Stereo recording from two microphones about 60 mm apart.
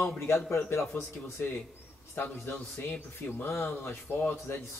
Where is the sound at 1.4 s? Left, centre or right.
Left.